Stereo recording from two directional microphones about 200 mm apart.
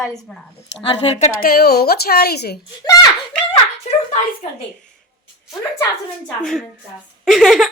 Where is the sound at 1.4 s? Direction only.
50° left (ahead or behind).